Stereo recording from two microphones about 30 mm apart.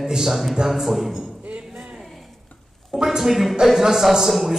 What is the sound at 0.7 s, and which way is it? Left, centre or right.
Speech, centre.